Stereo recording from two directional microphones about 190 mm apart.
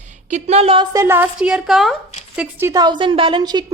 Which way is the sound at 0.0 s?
40° right (ahead or behind).